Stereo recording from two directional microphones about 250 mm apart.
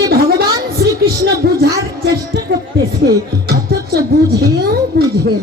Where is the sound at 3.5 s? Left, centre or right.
Right.